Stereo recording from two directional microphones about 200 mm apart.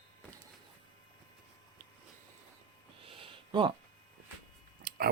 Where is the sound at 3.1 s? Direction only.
25° right (ahead or behind).